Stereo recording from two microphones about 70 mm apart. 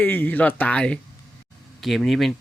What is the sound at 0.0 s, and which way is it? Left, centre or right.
Speech, left.